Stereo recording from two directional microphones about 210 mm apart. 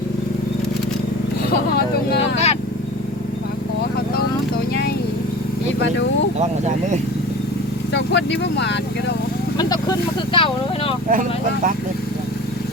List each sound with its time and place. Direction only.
2.1 s speech: 30° left (ahead or behind)
7.9 s speech: 55° left (ahead or behind)
9.6 s speech: 20° left (ahead or behind)
11.1 s speech: 40° right (ahead or behind)